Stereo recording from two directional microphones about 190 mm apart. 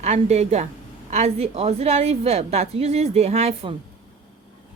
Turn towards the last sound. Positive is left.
turn(degrees=-35)  # may be behind; listen again after turning